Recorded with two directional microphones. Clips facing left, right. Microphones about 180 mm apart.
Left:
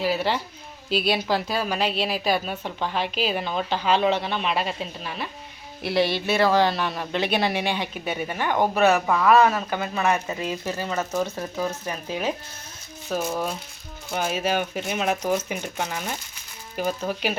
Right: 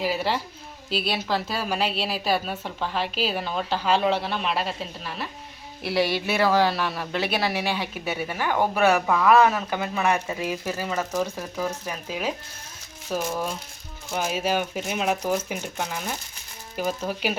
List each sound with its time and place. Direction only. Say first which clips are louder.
0.0 s a woman's voice: left 1 dB; 10° right (ahead or behind)
9.0 s a woman's voice: even; centre (ahead or behind)
9.3 s a woman's voice: even; 15° right (ahead or behind)